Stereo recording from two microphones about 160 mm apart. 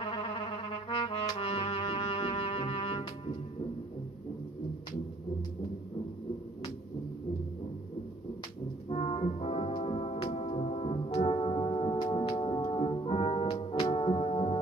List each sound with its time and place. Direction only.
0.0 s brass instrument: 40° left (ahead or behind)
8.8 s music: 35° left (ahead or behind)